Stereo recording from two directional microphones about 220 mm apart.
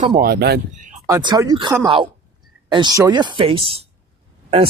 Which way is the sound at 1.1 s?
20° right (ahead or behind).